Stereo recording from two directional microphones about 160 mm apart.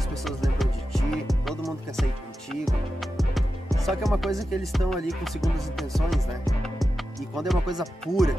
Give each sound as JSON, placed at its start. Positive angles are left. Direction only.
{"t": 0.1, "sound": "music", "side_deg": 0}